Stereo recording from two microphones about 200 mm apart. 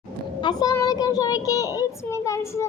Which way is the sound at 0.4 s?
20° left (ahead or behind).